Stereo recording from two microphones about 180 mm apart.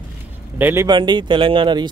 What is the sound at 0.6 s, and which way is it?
Speech, 15° right (ahead or behind).